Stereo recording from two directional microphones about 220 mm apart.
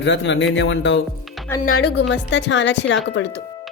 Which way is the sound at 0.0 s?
55° left (ahead or behind).